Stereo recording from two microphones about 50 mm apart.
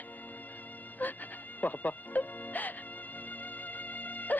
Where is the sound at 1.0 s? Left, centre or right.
Left.